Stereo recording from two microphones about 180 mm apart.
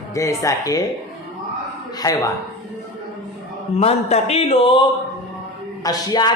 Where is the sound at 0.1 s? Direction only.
15° left (ahead or behind).